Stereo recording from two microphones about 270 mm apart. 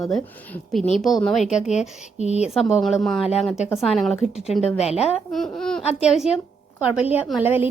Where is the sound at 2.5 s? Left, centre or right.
Centre.